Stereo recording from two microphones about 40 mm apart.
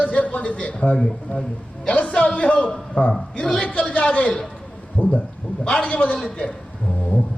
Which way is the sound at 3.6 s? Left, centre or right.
Left.